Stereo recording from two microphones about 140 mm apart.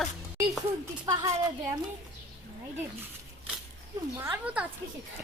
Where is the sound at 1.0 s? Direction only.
25° right (ahead or behind).